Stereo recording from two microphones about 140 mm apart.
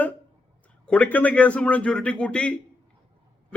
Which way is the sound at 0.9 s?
10° left (ahead or behind).